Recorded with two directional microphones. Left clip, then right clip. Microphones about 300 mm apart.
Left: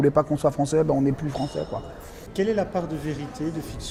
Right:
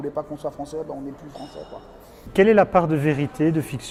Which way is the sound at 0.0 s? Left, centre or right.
Left.